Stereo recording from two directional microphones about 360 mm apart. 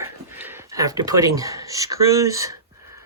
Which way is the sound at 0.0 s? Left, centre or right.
Centre.